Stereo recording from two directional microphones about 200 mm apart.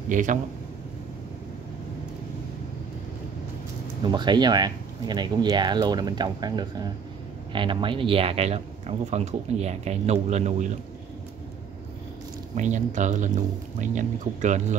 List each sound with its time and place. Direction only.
0.1 s speech: 40° right (ahead or behind)
4.0 s speech: 20° right (ahead or behind)
12.5 s speech: 35° right (ahead or behind)